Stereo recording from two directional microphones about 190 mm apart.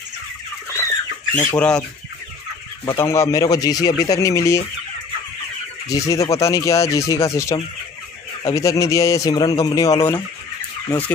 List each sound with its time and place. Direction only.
1.3 s a man's voice: 10° left (ahead or behind)
2.8 s a man's voice: 15° left (ahead or behind)
5.9 s a man's voice: 15° left (ahead or behind)